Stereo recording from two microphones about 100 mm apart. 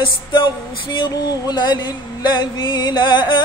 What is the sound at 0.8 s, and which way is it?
Female singing, 50° left (ahead or behind).